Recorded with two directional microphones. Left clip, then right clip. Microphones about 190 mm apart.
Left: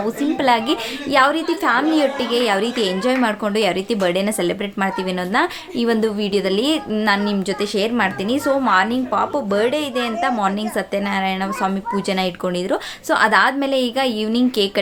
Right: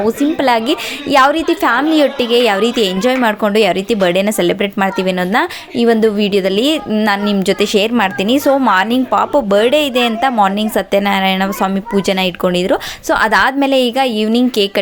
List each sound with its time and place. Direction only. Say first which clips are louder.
0.0 s speech: right 5 dB; 30° right (ahead or behind)